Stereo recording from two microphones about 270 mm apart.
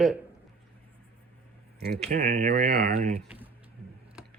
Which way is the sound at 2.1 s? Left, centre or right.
Right.